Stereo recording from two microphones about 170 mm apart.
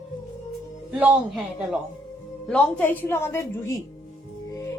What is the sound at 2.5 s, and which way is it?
A woman's voice, 5° left (ahead or behind).